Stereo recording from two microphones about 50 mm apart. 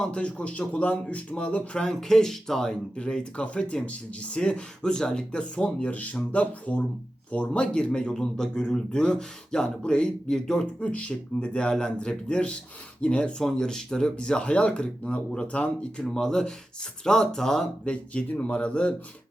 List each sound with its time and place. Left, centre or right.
0.0 s speech: left
16.0 s speech: centre
17.8 s speech: left